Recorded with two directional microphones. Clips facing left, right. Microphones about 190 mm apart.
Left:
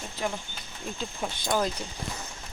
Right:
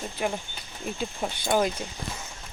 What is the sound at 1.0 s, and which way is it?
Speech, 10° right (ahead or behind).